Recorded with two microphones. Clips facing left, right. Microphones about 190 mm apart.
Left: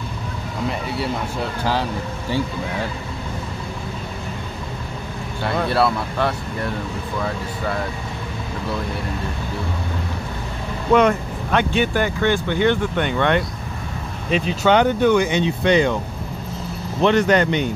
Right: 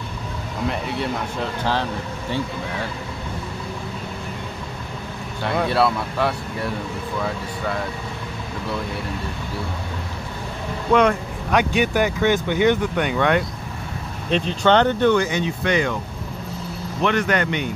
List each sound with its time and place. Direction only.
0.7 s speech: centre (ahead or behind)
5.4 s speech: centre (ahead or behind)
10.9 s speech: 5° left (ahead or behind)
11.5 s speech: 15° right (ahead or behind)
14.3 s speech: 5° left (ahead or behind)
15.2 s speech: 25° left (ahead or behind)
17.0 s speech: 30° left (ahead or behind)